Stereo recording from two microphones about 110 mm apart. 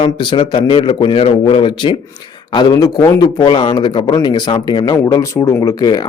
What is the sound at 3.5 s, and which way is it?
Speech, 55° left (ahead or behind).